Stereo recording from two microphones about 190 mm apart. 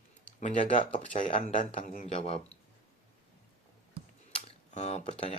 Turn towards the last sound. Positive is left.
turn(degrees=35)  # may be behind; listen again after turning